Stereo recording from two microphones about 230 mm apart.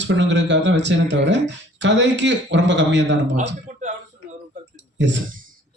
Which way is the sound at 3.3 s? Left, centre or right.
Right.